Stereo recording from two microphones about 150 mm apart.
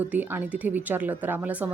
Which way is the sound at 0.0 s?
10° right (ahead or behind).